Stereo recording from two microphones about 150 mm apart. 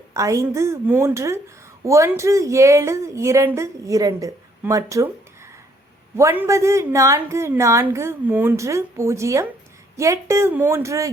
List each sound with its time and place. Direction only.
0.1 s a woman's voice: 20° right (ahead or behind)
6.1 s a woman's voice: 15° right (ahead or behind)